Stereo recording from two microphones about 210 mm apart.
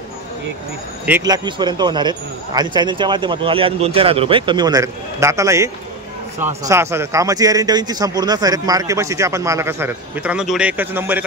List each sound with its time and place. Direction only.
1.0 s a man's voice: 15° right (ahead or behind)